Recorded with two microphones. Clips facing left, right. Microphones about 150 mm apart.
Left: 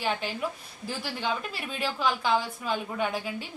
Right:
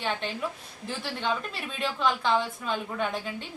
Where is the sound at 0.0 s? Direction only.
5° left (ahead or behind).